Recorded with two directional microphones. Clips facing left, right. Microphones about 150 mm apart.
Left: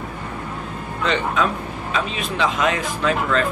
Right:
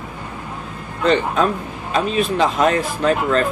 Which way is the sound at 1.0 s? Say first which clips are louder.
Right 4 dB; 40° right (ahead or behind).